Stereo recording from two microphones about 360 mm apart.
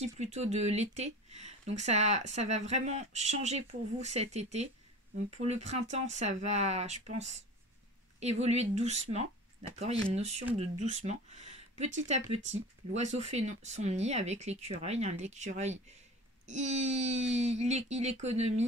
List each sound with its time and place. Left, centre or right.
0.0 s speech: centre
8.2 s speech: centre